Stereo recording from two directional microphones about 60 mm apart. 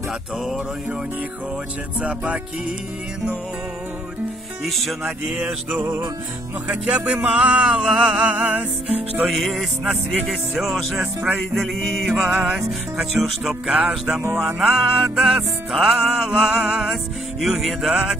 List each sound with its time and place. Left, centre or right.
2.0 s music: centre
4.6 s speech: centre
7.2 s music: right
7.6 s music: centre
8.3 s music: right
9.3 s speech: centre
12.2 s music: centre